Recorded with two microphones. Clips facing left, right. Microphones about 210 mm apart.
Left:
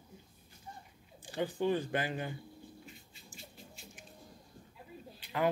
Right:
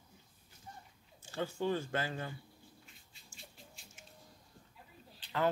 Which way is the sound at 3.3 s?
Centre (ahead or behind).